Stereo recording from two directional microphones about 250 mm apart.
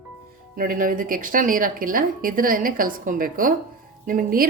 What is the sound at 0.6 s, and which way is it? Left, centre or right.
Speech, right.